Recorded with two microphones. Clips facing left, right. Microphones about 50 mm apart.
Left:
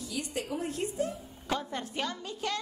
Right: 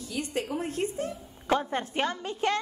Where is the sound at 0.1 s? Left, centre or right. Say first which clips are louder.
Right 4 dB; right.